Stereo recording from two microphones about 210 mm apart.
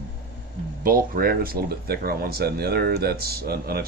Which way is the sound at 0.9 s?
45° right (ahead or behind).